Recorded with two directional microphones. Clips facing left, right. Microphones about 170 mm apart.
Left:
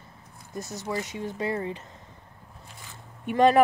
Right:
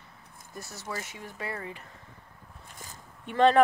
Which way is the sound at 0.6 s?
20° left (ahead or behind).